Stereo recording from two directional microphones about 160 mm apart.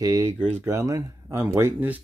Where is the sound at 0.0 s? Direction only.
20° right (ahead or behind).